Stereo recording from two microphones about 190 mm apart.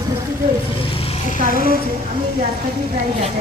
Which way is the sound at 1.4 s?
50° right (ahead or behind).